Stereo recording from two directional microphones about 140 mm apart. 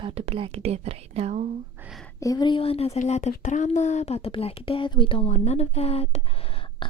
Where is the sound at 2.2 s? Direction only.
30° left (ahead or behind).